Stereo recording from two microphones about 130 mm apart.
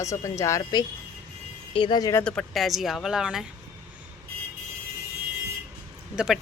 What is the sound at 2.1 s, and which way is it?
A woman's voice, 10° left (ahead or behind).